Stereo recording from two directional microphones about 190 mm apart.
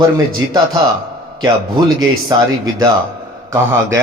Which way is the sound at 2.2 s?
20° right (ahead or behind).